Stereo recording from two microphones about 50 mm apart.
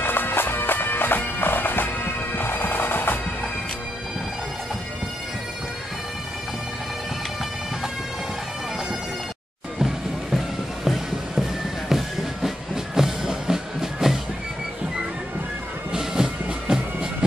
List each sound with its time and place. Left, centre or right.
0.0 s bagpipes: left
9.8 s music: centre
15.9 s music: centre